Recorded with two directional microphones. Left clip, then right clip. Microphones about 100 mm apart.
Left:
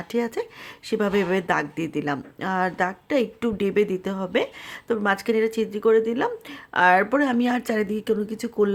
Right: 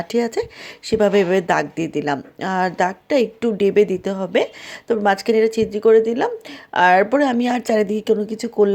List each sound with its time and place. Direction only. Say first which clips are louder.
0.0 s a woman's voice: right 6 dB; 35° right (ahead or behind)